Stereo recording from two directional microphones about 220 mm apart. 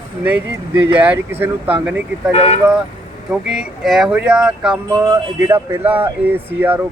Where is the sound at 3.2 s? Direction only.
5° right (ahead or behind).